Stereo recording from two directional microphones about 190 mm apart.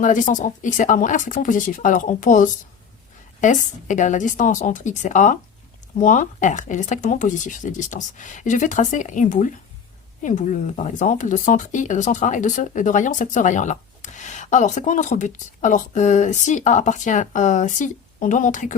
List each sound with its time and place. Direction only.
0.0 s speech: 40° left (ahead or behind)